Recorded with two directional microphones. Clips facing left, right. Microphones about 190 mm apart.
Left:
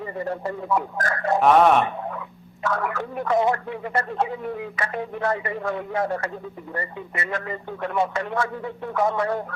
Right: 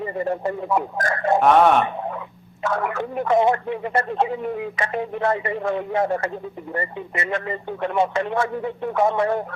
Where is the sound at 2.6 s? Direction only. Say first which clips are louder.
Right 2 dB; 25° right (ahead or behind).